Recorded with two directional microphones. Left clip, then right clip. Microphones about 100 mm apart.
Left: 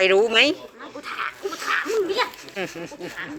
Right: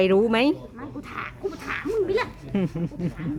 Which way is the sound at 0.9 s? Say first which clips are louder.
Left 6 dB; 10° right (ahead or behind).